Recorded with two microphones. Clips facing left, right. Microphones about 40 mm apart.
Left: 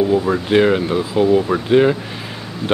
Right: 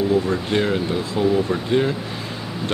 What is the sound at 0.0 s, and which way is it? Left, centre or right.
Speech, centre.